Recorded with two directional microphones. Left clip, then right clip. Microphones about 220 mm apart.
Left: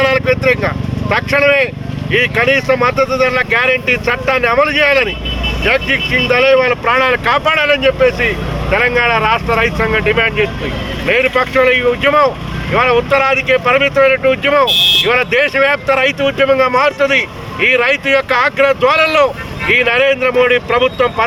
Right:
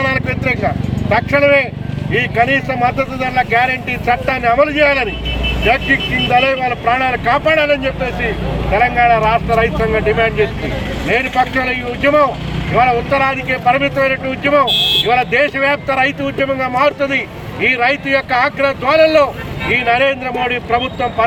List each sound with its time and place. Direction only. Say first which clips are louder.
0.0 s vehicle: left 5 dB; 10° left (ahead or behind)
1.1 s speech: even; 10° left (ahead or behind)
14.7 s speech: left 3 dB; 45° left (ahead or behind)
15.0 s speech: left 1 dB; 15° left (ahead or behind)